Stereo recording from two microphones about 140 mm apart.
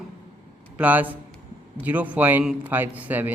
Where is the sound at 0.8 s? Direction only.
10° right (ahead or behind).